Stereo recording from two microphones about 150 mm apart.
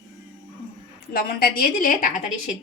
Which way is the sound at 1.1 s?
90° left.